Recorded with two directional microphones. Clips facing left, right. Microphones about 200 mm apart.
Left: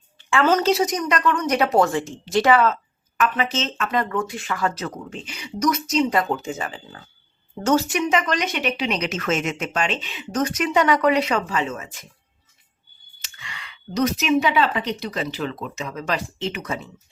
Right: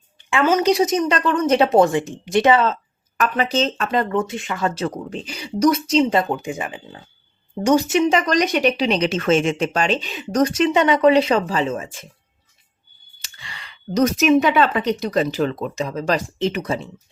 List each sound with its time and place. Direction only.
0.4 s a woman's voice: 10° right (ahead or behind)
3.2 s speech: 40° right (ahead or behind)
4.1 s a woman's voice: 25° right (ahead or behind)
6.3 s speech: 15° right (ahead or behind)
13.3 s speech: 35° right (ahead or behind)